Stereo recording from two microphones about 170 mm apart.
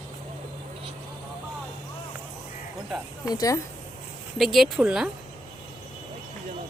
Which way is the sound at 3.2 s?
20° left (ahead or behind).